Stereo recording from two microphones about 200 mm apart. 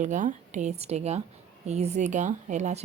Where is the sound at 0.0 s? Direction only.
40° right (ahead or behind).